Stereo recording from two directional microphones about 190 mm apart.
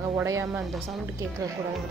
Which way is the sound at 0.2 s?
15° right (ahead or behind).